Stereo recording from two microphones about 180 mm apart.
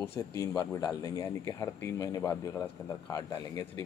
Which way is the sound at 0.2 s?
15° left (ahead or behind).